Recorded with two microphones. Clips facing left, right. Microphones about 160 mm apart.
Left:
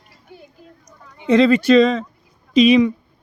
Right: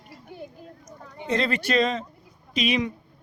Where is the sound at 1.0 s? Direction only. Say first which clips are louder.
Right 4 dB; 40° right (ahead or behind).